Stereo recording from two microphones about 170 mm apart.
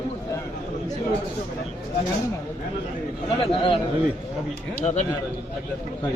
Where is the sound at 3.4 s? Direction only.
30° left (ahead or behind).